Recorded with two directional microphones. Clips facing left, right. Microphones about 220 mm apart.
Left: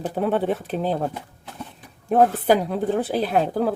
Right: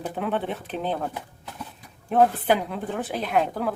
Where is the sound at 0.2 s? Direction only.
40° left (ahead or behind).